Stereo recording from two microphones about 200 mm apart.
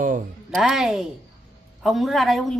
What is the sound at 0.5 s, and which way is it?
A man's voice, centre (ahead or behind).